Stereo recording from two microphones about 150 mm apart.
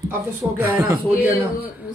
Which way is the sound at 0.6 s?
10° right (ahead or behind).